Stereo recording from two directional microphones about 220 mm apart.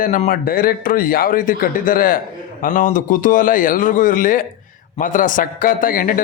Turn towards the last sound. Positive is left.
turn(degrees=40)  # may be behind; listen again after turning